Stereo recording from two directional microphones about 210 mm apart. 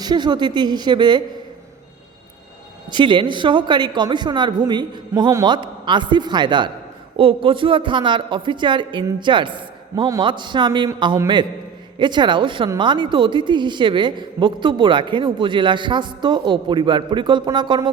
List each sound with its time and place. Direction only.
0.0 s speech: 20° right (ahead or behind)
2.9 s speech: 20° right (ahead or behind)